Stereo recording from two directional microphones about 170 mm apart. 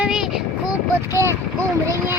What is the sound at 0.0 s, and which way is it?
Vehicle, 5° right (ahead or behind).